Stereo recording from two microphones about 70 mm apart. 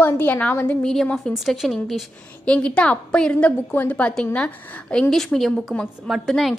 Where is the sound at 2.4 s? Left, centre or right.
Centre.